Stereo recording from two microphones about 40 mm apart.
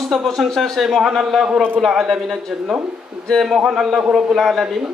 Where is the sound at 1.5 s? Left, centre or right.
Right.